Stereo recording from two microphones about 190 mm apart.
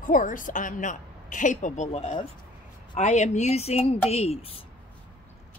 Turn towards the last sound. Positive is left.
turn(degrees=35)  # may be behind; listen again after turning